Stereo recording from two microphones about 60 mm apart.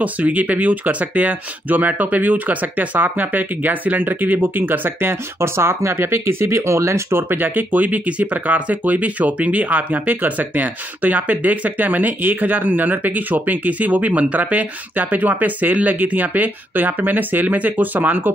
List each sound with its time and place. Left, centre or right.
0.0 s speech: right